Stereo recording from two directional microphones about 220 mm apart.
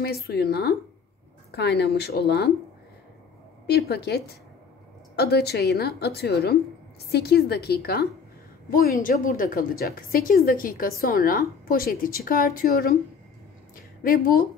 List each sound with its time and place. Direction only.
0.0 s speech: 45° left (ahead or behind)
3.6 s a woman's voice: 45° left (ahead or behind)
14.0 s a woman's voice: 40° left (ahead or behind)